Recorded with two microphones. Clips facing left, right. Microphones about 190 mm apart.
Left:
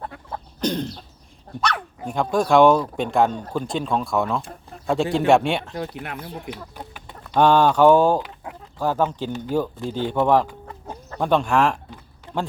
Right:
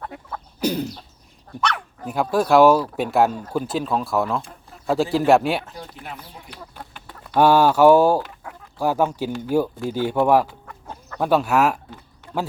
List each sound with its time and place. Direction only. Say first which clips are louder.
0.6 s cough: right 1 dB; 5° right (ahead or behind)
2.0 s speech: right 1 dB; 5° right (ahead or behind)
5.7 s speech: left 6 dB; 65° left (ahead or behind)
6.7 s a sound: left 2 dB; 15° left (ahead or behind)
7.3 s speech: right 1 dB; 10° right (ahead or behind)
8.4 s chicken: left 2 dB; 20° left (ahead or behind)
8.8 s speech: right 1 dB; 10° right (ahead or behind)